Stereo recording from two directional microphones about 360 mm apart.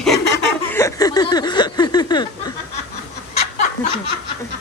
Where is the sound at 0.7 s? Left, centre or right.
Centre.